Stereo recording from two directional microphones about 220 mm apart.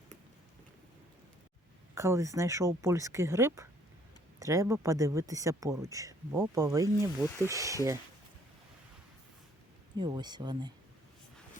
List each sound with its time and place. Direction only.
2.0 s speech: 15° right (ahead or behind)
7.3 s speech: 15° left (ahead or behind)
7.5 s speech: 15° right (ahead or behind)
10.0 s speech: 20° right (ahead or behind)